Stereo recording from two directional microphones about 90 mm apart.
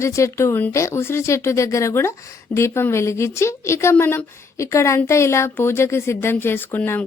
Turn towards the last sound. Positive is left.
turn(degrees=20)  # may be behind; listen again after turning